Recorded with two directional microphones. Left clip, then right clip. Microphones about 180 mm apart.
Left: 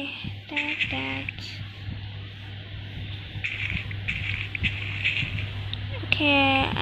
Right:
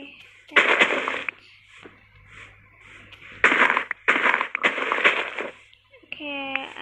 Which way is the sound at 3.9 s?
25° right (ahead or behind).